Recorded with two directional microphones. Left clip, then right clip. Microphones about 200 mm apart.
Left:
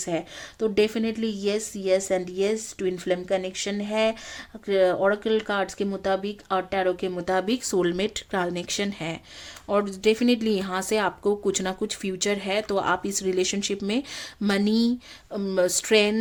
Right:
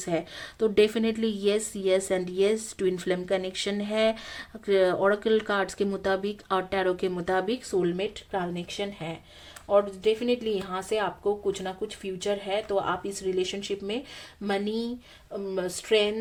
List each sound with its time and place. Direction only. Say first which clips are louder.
0.0 s a woman's voice: left 1 dB; 5° left (ahead or behind)
7.4 s speech: left 2 dB; 25° left (ahead or behind)
7.8 s speech: left 3 dB; 45° left (ahead or behind)